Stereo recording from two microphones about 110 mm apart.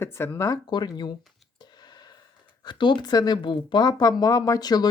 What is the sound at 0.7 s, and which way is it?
Speech, 40° left (ahead or behind).